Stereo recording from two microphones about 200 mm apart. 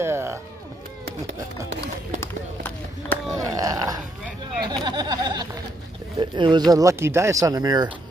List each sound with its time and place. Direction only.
0.0 s music: 10° right (ahead or behind)
2.1 s run: 10° left (ahead or behind)
3.3 s a sound: 15° right (ahead or behind)
4.7 s speech: 20° right (ahead or behind)